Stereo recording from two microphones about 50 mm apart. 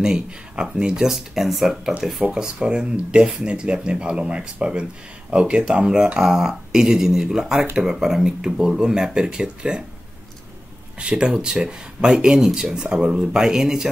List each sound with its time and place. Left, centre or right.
0.0 s speech: centre
1.0 s speech: centre
2.3 s speech: centre
11.0 s speech: centre
12.9 s speech: right